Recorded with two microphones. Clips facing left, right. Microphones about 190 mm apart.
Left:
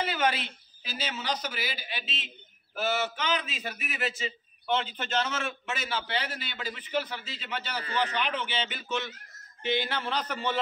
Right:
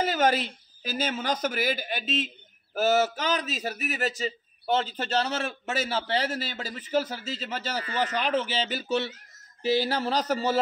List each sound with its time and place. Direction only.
0.0 s a man's voice: 45° right (ahead or behind)